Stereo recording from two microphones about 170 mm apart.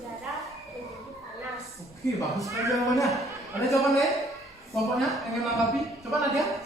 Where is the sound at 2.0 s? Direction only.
20° left (ahead or behind).